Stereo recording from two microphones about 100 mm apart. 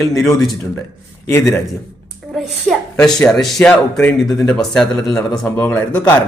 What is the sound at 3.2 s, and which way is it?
Speech, 5° left (ahead or behind).